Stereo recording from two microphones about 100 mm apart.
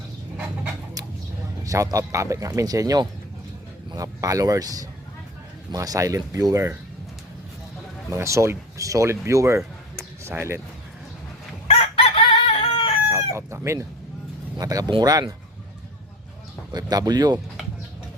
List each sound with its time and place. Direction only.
1.6 s speech: 35° right (ahead or behind)
8.1 s speech: 30° right (ahead or behind)
9.9 s a sound: 30° right (ahead or behind)
11.7 s chicken: 75° left (ahead or behind)
13.3 s speech: 30° right (ahead or behind)
16.7 s speech: 40° right (ahead or behind)